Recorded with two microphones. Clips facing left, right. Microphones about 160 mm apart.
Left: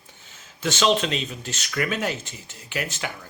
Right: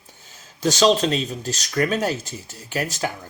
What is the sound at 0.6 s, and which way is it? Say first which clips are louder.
Speech: right 4 dB; 40° right (ahead or behind).